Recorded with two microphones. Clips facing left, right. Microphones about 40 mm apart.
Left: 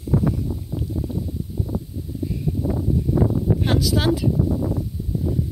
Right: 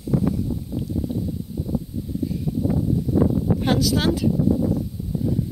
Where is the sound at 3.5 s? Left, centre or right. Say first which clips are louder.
Right 1 dB; centre.